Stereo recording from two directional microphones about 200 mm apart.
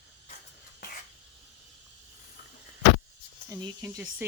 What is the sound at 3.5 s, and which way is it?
Speech, 15° right (ahead or behind).